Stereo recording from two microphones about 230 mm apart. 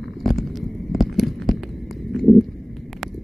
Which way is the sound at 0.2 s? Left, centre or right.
Centre.